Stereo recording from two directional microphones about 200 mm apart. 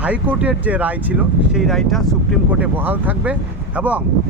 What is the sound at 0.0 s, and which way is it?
Speech, 5° right (ahead or behind).